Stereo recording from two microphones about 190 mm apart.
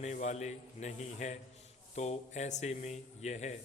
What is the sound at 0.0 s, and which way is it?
A man's voice, 40° left (ahead or behind).